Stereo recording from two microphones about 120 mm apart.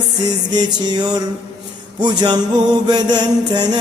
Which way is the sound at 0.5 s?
35° right (ahead or behind).